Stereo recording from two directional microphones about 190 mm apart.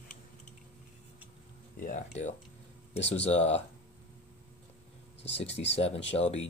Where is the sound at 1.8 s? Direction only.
40° left (ahead or behind).